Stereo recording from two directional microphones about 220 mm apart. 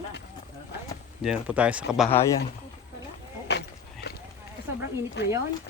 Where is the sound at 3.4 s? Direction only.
50° left (ahead or behind).